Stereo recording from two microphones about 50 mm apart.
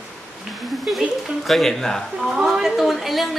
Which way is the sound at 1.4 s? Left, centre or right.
Centre.